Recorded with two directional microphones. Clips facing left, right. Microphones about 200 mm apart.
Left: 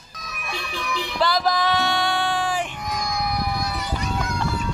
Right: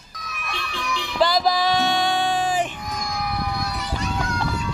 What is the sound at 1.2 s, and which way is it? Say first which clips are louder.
Music: right 2 dB; 15° right (ahead or behind).